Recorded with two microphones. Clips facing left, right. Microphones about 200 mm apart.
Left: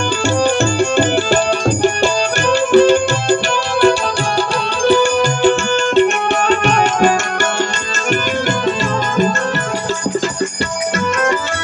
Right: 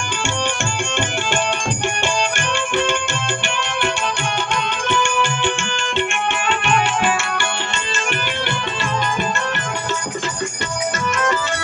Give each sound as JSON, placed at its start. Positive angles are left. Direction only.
{"t": 0.7, "sound": "tabla", "side_deg": 35}
{"t": 2.5, "sound": "music", "side_deg": 35}
{"t": 4.8, "sound": "music", "side_deg": 35}